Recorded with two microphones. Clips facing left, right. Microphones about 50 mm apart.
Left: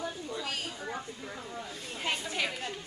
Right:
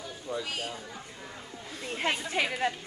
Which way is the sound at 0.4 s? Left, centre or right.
Centre.